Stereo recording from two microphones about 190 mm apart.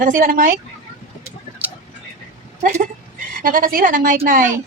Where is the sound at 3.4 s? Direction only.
45° right (ahead or behind).